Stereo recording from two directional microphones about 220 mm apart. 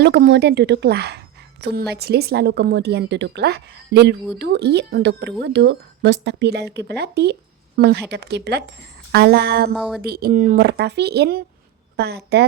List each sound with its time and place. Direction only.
0.0 s speech: 50° right (ahead or behind)
9.7 s speech: centre (ahead or behind)
10.0 s speech: 45° right (ahead or behind)